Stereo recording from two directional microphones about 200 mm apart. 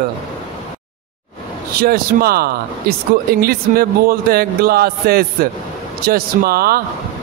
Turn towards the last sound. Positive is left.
turn(degrees=-50)  # may be behind; listen again after turning